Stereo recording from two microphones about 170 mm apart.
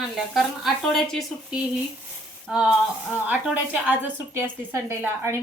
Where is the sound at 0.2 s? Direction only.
Centre (ahead or behind).